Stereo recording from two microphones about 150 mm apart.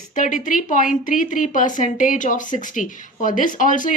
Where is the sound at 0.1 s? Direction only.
60° left (ahead or behind).